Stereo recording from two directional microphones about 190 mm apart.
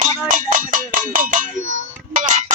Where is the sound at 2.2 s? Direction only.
40° right (ahead or behind).